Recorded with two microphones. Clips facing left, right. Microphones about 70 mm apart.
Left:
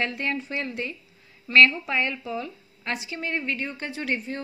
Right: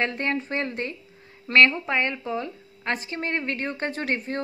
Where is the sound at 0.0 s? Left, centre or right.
Right.